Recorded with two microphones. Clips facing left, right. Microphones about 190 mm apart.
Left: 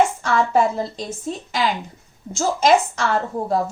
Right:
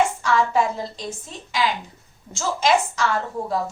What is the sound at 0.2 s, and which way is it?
Speech, 45° left (ahead or behind).